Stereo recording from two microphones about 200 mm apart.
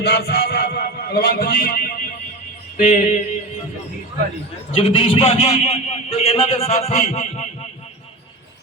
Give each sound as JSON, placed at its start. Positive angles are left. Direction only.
{"t": 0.0, "sound": "music", "side_deg": 55}
{"t": 2.7, "sound": "a man's voice", "side_deg": 40}
{"t": 4.7, "sound": "a man's voice", "side_deg": 30}